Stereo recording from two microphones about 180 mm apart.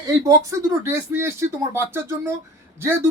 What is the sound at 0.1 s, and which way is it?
A woman's voice, 15° right (ahead or behind).